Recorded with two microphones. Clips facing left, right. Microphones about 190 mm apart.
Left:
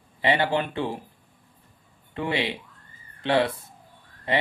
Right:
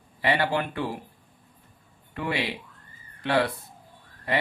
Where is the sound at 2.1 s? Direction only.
25° left (ahead or behind).